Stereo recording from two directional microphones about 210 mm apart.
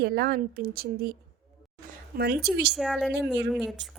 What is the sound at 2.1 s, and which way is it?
Speech, 45° right (ahead or behind).